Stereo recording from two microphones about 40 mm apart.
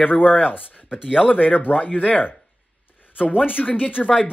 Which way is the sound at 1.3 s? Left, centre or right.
Left.